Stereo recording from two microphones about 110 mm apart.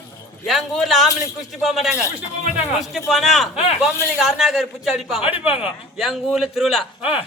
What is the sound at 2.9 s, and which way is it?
A man's voice, centre (ahead or behind).